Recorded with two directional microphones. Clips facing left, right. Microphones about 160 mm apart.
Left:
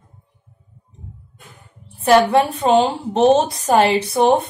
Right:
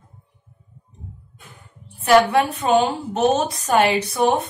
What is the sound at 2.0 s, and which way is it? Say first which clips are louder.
A woman's voice: left 2 dB; 30° left (ahead or behind).